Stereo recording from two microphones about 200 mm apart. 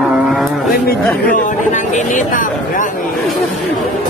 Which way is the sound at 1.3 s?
40° left (ahead or behind).